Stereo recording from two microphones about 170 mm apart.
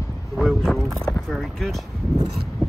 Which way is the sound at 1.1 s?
Centre (ahead or behind).